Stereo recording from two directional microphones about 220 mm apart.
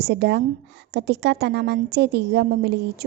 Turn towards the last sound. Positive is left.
turn(degrees=-50)  # may be behind; listen again after turning